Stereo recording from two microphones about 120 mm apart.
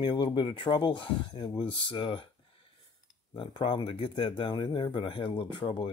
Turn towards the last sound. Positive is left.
turn(degrees=45)  # may be behind; listen again after turning